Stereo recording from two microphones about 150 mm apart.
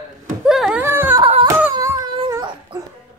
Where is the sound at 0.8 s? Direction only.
15° right (ahead or behind).